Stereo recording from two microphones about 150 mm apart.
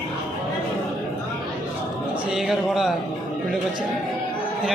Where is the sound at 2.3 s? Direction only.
5° right (ahead or behind).